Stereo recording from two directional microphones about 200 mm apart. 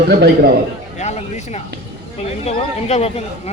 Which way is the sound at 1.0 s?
35° left (ahead or behind).